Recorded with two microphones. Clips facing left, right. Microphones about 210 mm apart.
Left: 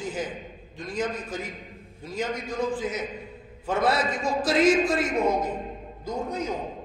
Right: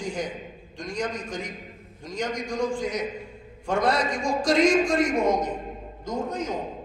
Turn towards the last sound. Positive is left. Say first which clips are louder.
# right 1 dB
turn(degrees=10)  # may be behind; listen again after turning